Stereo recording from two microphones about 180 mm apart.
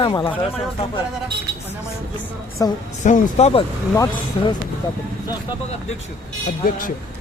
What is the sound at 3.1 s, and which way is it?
Speech, 35° left (ahead or behind).